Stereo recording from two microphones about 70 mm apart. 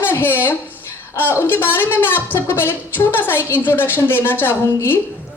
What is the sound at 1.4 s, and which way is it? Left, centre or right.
A woman's voice, left.